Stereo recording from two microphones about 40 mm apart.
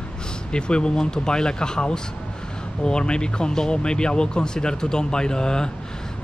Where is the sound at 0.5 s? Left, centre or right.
Left.